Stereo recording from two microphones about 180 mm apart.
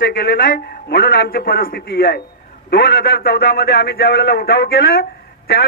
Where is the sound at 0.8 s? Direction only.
55° left (ahead or behind).